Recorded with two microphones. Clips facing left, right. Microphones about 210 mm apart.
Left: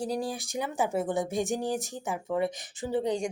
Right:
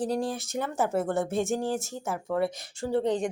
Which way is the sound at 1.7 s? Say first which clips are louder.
Right 1 dB; 15° left (ahead or behind).